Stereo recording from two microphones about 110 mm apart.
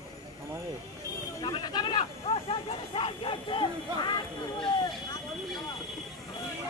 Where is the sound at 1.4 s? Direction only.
45° left (ahead or behind).